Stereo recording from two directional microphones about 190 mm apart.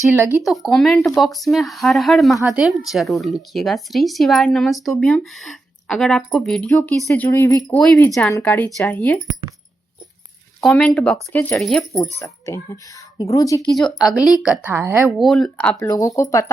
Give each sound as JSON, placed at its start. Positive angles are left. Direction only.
{"t": 0.4, "sound": "speech", "side_deg": 0}
{"t": 10.6, "sound": "speech", "side_deg": 0}
{"t": 12.2, "sound": "speech", "side_deg": 15}
{"t": 13.7, "sound": "speech", "side_deg": 0}
{"t": 14.6, "sound": "a woman's voice", "side_deg": -10}
{"t": 15.2, "sound": "speech", "side_deg": 0}
{"t": 15.9, "sound": "speech", "side_deg": 15}